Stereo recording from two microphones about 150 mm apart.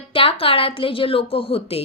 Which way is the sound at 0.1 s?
40° left (ahead or behind).